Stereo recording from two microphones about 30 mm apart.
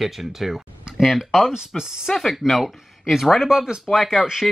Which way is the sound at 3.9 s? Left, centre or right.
Left.